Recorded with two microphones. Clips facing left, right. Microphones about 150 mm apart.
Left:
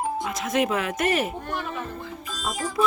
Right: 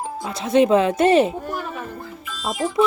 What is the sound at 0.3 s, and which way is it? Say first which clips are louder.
Speech: right 11 dB; 30° right (ahead or behind).